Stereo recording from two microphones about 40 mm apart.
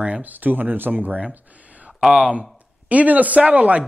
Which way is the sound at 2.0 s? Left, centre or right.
Centre.